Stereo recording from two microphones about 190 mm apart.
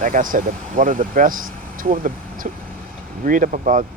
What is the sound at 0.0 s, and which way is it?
Speech, 45° right (ahead or behind).